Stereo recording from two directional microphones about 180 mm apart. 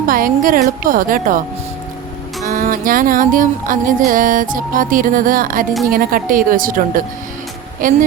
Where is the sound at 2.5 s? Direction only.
45° right (ahead or behind).